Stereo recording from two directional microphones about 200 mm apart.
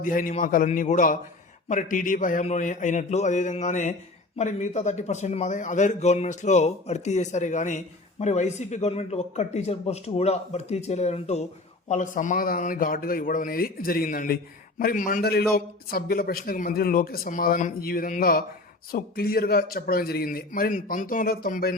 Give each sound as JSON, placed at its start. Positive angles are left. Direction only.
{"t": 0.0, "sound": "a man's voice", "side_deg": 40}